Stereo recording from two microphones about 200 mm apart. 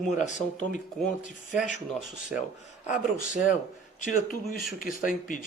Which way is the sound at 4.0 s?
40° left (ahead or behind).